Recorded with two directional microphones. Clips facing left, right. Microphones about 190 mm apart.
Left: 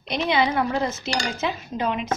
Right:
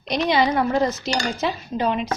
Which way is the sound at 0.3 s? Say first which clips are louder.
Right 2 dB; 40° right (ahead or behind).